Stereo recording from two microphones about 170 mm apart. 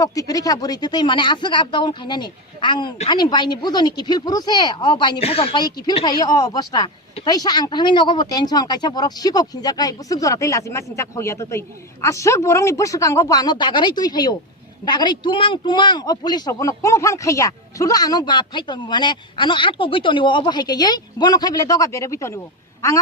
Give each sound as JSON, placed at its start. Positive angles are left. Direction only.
{"t": 0.0, "sound": "speech", "side_deg": 20}